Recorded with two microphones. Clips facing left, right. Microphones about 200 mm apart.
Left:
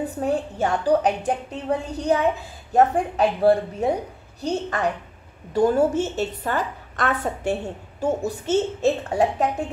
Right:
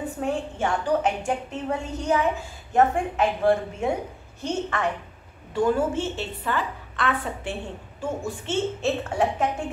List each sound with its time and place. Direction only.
0.0 s a woman's voice: 40° left (ahead or behind)